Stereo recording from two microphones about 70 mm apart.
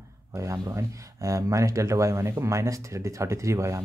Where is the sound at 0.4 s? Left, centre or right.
Right.